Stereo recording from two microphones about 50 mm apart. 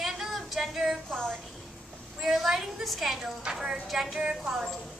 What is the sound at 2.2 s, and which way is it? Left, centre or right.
A woman's voice, centre.